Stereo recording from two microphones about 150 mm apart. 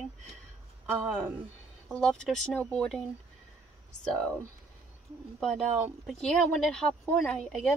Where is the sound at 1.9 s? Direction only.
5° left (ahead or behind).